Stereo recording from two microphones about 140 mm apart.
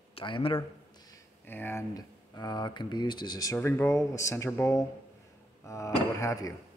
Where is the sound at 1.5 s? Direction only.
15° left (ahead or behind).